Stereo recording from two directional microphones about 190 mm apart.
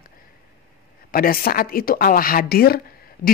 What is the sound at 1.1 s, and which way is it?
A woman's voice, 50° left (ahead or behind).